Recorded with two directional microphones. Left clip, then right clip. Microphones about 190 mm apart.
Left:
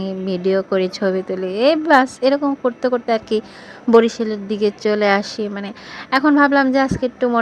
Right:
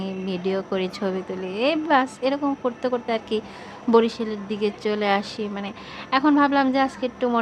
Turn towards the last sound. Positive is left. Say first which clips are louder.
# left 5 dB
turn(degrees=25)  # may be behind; listen again after turning